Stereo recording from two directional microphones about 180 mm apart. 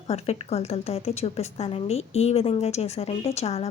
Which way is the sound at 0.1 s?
35° left (ahead or behind).